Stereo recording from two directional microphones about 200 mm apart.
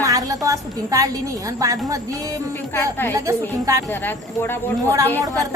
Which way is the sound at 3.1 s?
15° right (ahead or behind).